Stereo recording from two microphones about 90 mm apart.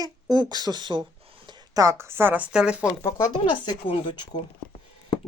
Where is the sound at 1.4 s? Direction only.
55° right (ahead or behind).